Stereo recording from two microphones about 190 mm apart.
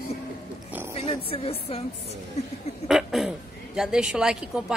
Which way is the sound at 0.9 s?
30° left (ahead or behind).